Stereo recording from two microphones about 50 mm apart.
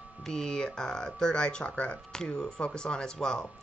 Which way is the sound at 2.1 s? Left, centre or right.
Centre.